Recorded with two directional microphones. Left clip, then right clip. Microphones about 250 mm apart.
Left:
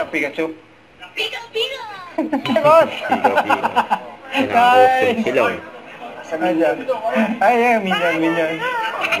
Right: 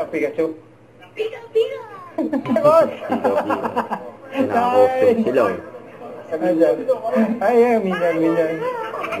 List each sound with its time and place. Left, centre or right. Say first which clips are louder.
0.1 s a man's voice: even; centre
1.7 s a man's voice: left 2 dB; centre
6.3 s a man's voice: right 1 dB; centre